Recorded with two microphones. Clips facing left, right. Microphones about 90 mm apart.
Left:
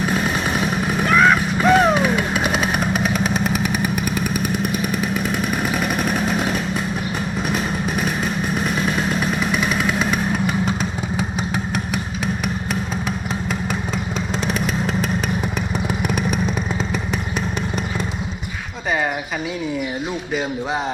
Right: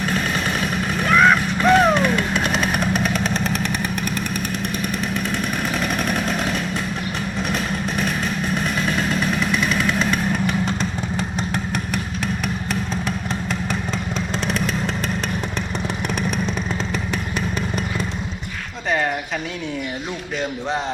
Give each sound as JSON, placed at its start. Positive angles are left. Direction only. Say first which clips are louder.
{"t": 0.6, "sound": "music", "louder": "left 2 dB", "side_deg": 5}
{"t": 9.0, "sound": "vehicle", "louder": "even", "side_deg": 5}